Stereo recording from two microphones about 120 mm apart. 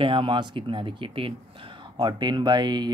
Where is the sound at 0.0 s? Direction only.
45° right (ahead or behind).